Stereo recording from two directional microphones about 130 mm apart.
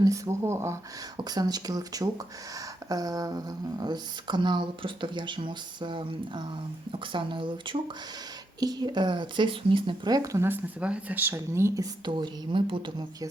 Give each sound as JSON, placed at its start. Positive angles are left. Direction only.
{"t": 0.0, "sound": "speech", "side_deg": -25}
{"t": 12.1, "sound": "speech", "side_deg": -40}